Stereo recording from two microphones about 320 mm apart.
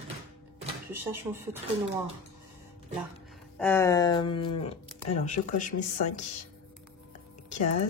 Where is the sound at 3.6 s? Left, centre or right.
Centre; by 5.7 s left.